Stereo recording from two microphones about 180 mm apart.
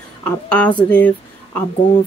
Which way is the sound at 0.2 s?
5° left (ahead or behind).